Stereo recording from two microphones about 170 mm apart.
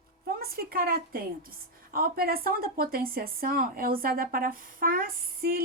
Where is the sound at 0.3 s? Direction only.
60° right (ahead or behind).